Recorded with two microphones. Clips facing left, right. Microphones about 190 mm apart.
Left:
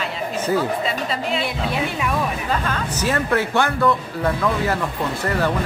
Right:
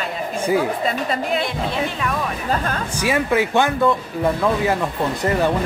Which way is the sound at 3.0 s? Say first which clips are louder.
Right 2 dB; 10° right (ahead or behind).